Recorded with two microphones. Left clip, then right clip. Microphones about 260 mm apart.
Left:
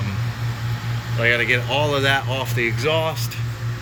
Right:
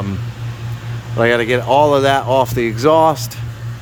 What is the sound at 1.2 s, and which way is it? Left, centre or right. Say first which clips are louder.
Speech: right 4 dB; centre.